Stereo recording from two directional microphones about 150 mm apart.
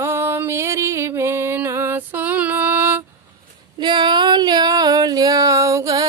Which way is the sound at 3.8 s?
30° right (ahead or behind).